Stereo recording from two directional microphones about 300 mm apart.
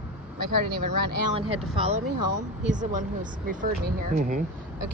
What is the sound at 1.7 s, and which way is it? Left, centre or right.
Speech, centre.